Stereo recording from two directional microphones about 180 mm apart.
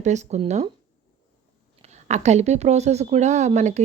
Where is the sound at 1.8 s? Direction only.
40° right (ahead or behind).